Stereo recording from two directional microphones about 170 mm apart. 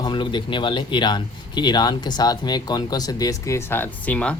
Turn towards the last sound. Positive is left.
turn(degrees=10)  # may be behind; listen again after turning